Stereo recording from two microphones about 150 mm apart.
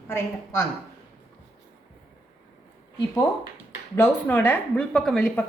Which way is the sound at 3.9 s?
15° left (ahead or behind).